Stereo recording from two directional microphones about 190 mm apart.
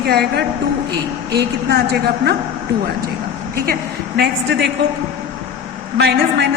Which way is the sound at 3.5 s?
55° right (ahead or behind).